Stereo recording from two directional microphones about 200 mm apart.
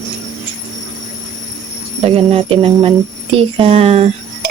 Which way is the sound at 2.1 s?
30° right (ahead or behind).